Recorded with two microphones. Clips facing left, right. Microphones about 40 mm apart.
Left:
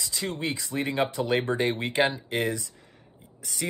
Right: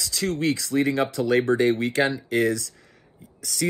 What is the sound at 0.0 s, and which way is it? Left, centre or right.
Speech, centre.